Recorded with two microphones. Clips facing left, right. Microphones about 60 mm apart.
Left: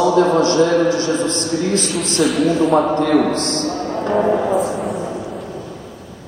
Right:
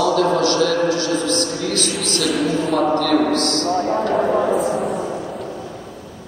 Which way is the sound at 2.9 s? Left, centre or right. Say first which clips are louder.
Left 1 dB; left.